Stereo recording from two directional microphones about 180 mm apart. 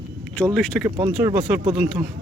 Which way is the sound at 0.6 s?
5° left (ahead or behind).